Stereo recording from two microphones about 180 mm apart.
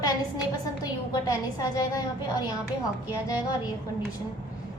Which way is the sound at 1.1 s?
20° left (ahead or behind).